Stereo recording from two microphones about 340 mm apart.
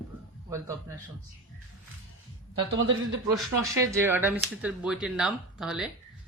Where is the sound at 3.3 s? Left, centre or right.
Centre.